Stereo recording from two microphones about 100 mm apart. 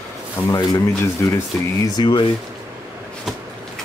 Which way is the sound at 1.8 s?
45° left (ahead or behind).